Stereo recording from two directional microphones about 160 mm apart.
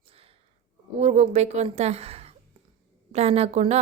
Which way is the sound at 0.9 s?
45° right (ahead or behind).